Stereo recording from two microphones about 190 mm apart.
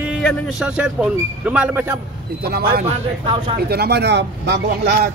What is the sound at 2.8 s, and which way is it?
Speech, 30° right (ahead or behind).